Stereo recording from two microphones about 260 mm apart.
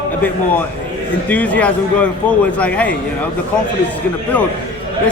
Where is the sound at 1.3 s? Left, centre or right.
Centre.